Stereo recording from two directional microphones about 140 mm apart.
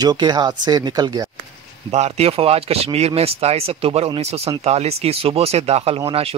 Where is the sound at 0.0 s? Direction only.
30° right (ahead or behind).